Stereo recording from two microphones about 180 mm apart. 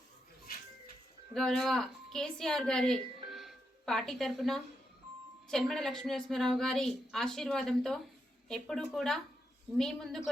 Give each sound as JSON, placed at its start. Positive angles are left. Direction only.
{"t": 1.3, "sound": "a woman's voice", "side_deg": 0}
{"t": 3.2, "sound": "music", "side_deg": 0}
{"t": 5.5, "sound": "a woman's voice", "side_deg": 5}